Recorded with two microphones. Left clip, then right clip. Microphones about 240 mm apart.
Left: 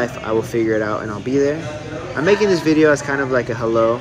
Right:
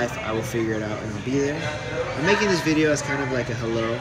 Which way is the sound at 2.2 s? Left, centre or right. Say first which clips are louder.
Left 6 dB; centre.